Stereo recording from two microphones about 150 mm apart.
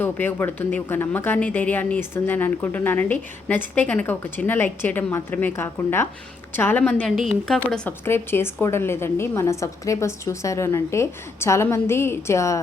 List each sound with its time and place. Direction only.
0.0 s speech: 15° left (ahead or behind)
7.2 s a woman's voice: centre (ahead or behind)
7.9 s a woman's voice: 15° left (ahead or behind)